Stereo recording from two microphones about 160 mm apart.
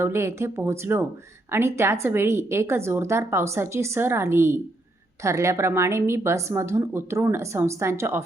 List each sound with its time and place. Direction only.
0.0 s a woman's voice: 15° right (ahead or behind)